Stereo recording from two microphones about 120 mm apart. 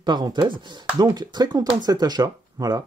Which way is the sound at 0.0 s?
40° right (ahead or behind).